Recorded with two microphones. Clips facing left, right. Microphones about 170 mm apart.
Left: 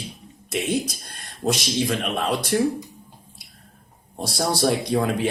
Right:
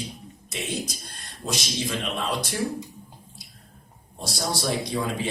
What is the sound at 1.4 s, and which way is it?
A man's voice, 55° left (ahead or behind).